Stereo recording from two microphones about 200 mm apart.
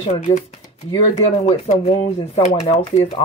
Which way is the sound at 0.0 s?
30° left (ahead or behind).